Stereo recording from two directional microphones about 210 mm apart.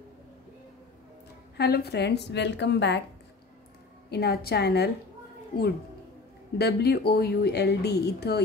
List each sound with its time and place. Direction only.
1.6 s speech: 50° left (ahead or behind)
4.1 s speech: 50° left (ahead or behind)
6.6 s speech: 50° left (ahead or behind)